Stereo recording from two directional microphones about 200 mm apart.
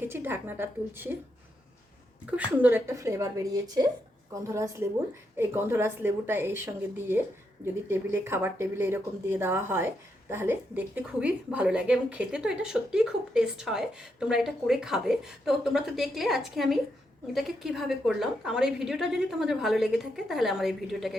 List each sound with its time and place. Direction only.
0.0 s speech: 10° right (ahead or behind)
2.2 s speech: 5° right (ahead or behind)